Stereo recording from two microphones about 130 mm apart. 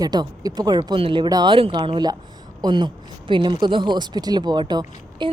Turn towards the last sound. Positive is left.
turn(degrees=-35)  # may be behind; listen again after turning